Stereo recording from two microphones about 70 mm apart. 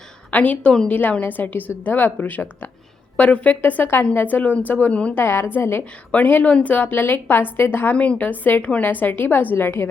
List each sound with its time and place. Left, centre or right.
0.3 s a woman's voice: left
5.1 s a woman's voice: left